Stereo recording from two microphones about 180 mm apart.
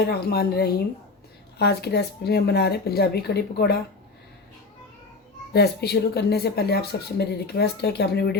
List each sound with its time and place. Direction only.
0.1 s speech: 60° left (ahead or behind)
5.5 s speech: 65° left (ahead or behind)